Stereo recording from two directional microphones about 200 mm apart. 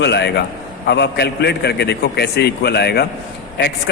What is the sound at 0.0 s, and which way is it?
A man's voice, 60° left (ahead or behind).